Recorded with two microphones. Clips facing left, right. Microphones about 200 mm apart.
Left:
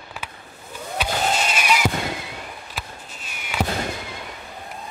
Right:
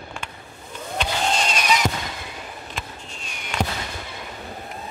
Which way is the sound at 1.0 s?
5° left (ahead or behind).